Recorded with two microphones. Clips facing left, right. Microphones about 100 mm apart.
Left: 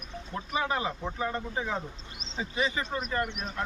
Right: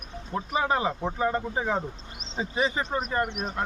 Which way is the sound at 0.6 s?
30° right (ahead or behind).